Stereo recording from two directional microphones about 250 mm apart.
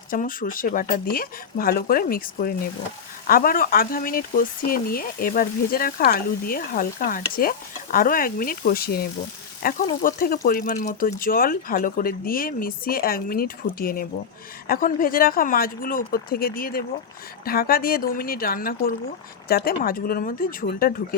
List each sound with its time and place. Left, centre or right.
0.1 s speech: left